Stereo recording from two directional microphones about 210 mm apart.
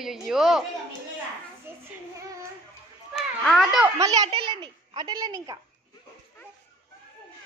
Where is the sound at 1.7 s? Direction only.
10° right (ahead or behind).